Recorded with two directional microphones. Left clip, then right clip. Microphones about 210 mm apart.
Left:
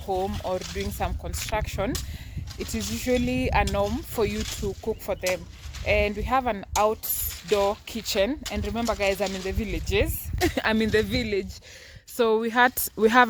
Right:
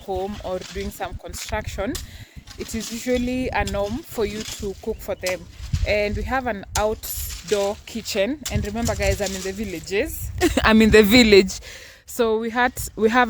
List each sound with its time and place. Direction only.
0.4 s speech: 5° right (ahead or behind)
4.4 s speech: 30° right (ahead or behind)
4.9 s speech: centre (ahead or behind)
7.3 s mechanisms: 45° right (ahead or behind)
7.5 s speech: centre (ahead or behind)
10.4 s speech: 45° right (ahead or behind)
12.1 s speech: centre (ahead or behind)